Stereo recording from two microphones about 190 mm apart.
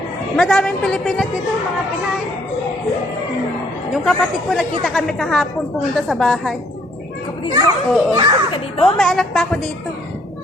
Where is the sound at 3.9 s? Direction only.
Centre (ahead or behind).